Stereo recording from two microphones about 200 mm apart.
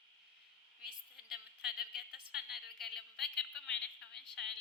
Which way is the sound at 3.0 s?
Centre (ahead or behind).